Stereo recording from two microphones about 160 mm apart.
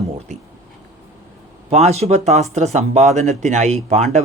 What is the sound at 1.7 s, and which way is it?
Speech, 40° right (ahead or behind).